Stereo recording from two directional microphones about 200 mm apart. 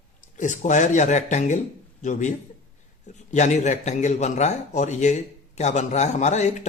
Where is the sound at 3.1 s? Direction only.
35° left (ahead or behind).